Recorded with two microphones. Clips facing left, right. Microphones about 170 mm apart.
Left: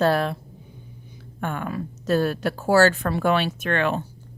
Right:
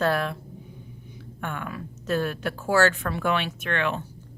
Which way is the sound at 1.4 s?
35° left (ahead or behind).